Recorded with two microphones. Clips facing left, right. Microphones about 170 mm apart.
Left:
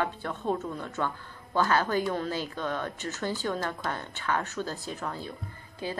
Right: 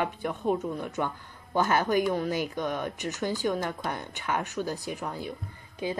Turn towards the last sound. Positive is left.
turn(degrees=-20)  # may be behind; listen again after turning